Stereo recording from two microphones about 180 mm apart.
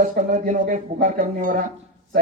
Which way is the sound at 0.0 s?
50° right (ahead or behind).